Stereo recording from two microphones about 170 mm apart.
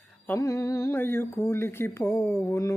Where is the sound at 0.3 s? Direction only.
20° left (ahead or behind).